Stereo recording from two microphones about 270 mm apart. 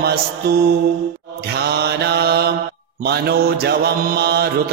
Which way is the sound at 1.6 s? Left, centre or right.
Right.